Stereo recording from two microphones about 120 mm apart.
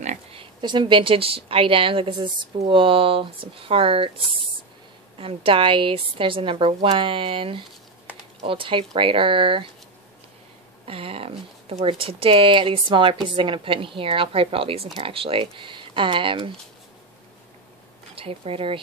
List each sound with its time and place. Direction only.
0.3 s speech: 45° right (ahead or behind)
5.2 s speech: 50° right (ahead or behind)
10.9 s speech: 50° right (ahead or behind)
18.1 s speech: 55° right (ahead or behind)